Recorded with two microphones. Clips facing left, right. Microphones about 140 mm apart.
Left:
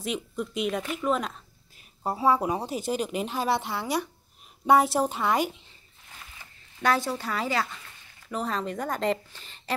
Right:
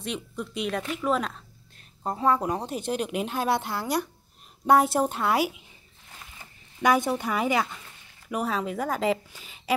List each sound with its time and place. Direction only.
0.0 s a woman's voice: centre (ahead or behind)
6.8 s a woman's voice: 15° right (ahead or behind)